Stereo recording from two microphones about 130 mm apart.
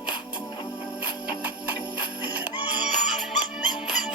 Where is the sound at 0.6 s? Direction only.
35° left (ahead or behind).